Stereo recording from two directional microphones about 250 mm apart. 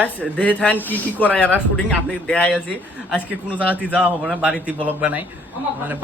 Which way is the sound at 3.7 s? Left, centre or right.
Centre.